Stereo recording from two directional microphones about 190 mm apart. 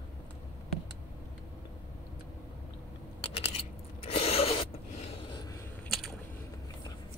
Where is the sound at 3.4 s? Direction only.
30° left (ahead or behind).